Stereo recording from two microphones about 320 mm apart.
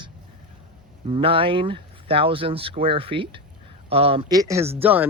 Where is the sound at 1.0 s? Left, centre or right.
Centre.